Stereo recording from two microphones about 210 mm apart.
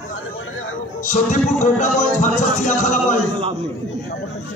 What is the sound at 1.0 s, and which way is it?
A man's voice, 35° left (ahead or behind).